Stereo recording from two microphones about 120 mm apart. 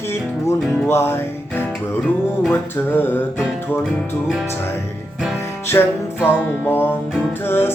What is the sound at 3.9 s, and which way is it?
Music, 5° right (ahead or behind).